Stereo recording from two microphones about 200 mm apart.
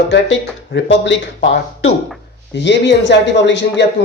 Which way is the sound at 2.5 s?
60° left (ahead or behind).